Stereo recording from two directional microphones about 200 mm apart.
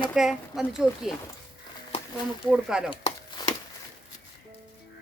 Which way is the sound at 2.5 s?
5° right (ahead or behind).